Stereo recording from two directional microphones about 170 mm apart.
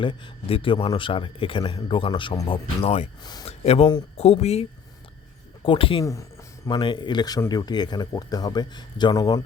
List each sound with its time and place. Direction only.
0.0 s a man's voice: 30° left (ahead or behind)
5.6 s a man's voice: 30° left (ahead or behind)